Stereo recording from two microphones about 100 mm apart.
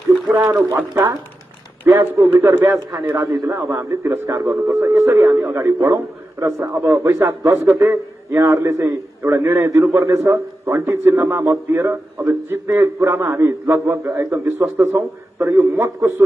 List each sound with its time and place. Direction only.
0.3 s speech: 25° right (ahead or behind)
1.9 s a man's voice: 25° right (ahead or behind)
3.2 s a man's voice: 35° right (ahead or behind)